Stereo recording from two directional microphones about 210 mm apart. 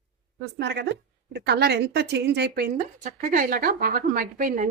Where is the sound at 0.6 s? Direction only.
55° right (ahead or behind).